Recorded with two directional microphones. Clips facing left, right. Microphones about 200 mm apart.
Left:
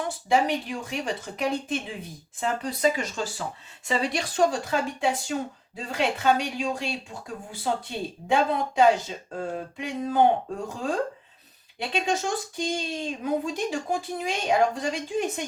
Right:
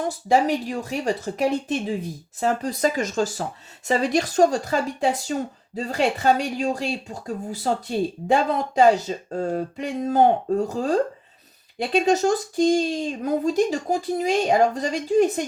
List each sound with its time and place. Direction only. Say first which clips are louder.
0.0 s speech: right 4 dB; 40° right (ahead or behind)